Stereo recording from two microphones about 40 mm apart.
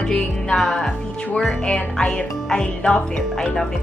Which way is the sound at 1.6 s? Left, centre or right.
Left.